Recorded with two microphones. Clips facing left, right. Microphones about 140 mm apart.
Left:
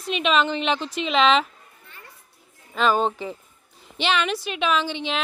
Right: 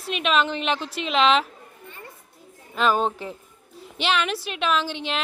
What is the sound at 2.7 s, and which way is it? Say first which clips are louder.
A woman's voice: left 1 dB; centre (ahead or behind).